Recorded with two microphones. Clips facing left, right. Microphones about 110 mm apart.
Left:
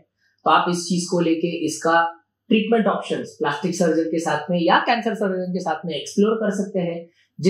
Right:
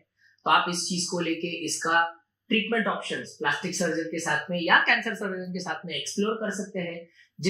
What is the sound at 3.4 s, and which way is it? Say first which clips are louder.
Speech: left 7 dB; 30° left (ahead or behind).